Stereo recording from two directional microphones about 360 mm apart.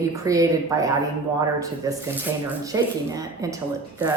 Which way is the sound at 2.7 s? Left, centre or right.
Centre.